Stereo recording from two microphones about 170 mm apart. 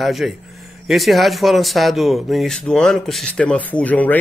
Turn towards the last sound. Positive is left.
turn(degrees=10)  # may be behind; listen again after turning